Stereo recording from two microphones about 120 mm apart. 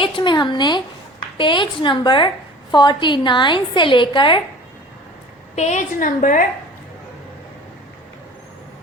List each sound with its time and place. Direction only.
0.0 s a woman's voice: 40° left (ahead or behind)
5.5 s a woman's voice: 80° left